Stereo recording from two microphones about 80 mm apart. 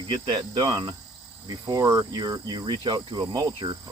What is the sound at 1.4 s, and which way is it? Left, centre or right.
Speech, right.